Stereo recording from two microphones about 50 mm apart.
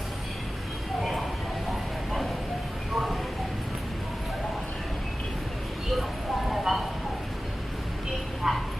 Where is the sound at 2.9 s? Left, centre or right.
Centre.